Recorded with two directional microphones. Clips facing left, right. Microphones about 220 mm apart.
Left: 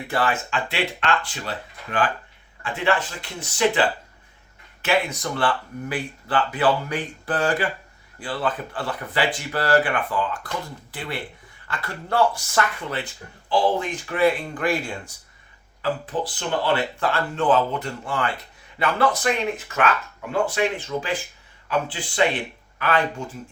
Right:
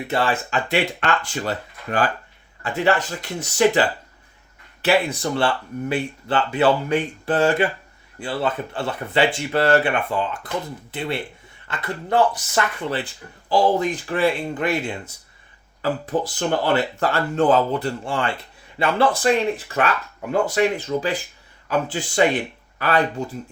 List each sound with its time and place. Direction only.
0.1 s speech: 25° right (ahead or behind)
0.5 s speech: 45° right (ahead or behind); by 12.6 s 20° right (ahead or behind)
13.5 s speech: 40° right (ahead or behind); by 15.1 s 20° right (ahead or behind)
15.8 s speech: 45° right (ahead or behind)